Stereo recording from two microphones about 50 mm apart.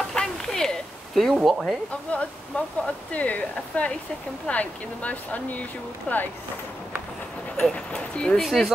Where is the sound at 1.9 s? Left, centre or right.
Left.